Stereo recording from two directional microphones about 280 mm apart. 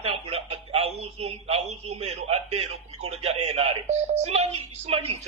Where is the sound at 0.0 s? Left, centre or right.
Right.